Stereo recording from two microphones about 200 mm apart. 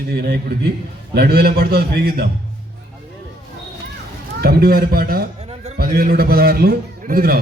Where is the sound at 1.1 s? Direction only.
50° right (ahead or behind).